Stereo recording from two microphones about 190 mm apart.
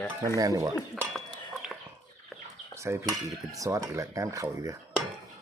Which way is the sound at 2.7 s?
15° right (ahead or behind).